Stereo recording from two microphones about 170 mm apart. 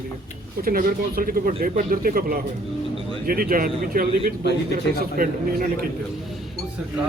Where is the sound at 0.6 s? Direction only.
60° right (ahead or behind).